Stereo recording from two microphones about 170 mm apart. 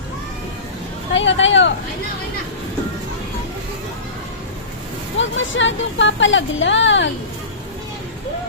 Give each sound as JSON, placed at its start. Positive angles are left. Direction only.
{"t": 1.1, "sound": "speech", "side_deg": 90}
{"t": 5.4, "sound": "speech", "side_deg": 90}